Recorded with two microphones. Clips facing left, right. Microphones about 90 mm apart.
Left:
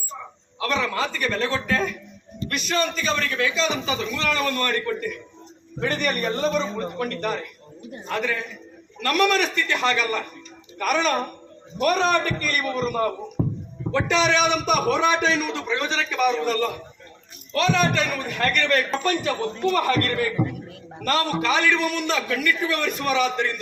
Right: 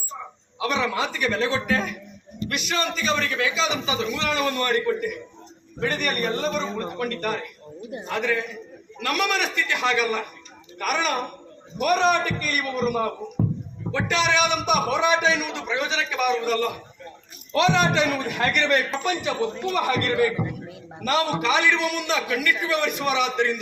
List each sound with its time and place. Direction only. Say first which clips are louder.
0.6 s a man's voice: even; 10° right (ahead or behind)
5.8 s a man's voice: left 1 dB; centre (ahead or behind)
17.5 s a man's voice: right 1 dB; 20° right (ahead or behind)